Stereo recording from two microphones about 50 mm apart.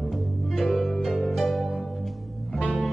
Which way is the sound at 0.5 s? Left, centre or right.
Centre.